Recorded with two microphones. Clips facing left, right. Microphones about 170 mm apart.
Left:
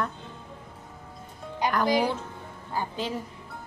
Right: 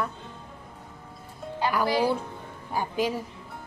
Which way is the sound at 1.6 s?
15° left (ahead or behind).